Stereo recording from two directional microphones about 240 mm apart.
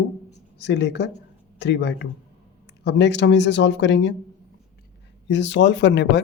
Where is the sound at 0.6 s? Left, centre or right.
Left.